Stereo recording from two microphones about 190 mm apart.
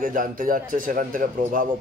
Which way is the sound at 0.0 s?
45° right (ahead or behind).